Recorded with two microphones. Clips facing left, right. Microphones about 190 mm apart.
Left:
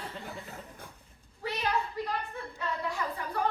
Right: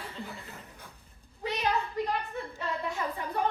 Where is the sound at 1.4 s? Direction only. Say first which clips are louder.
Right 2 dB; 20° right (ahead or behind).